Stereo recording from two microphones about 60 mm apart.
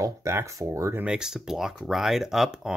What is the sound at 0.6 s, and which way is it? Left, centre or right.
Speech, right.